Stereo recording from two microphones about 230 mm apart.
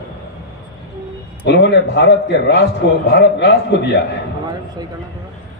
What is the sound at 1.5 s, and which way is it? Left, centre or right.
Speech, left.